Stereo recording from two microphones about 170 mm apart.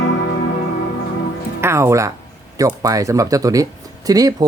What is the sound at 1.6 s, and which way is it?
Speech, 15° right (ahead or behind).